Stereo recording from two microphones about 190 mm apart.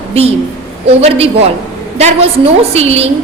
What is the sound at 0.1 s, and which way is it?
A woman's voice, 30° right (ahead or behind).